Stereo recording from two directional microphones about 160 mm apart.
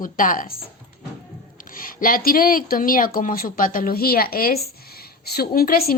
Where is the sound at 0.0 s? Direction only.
60° left (ahead or behind).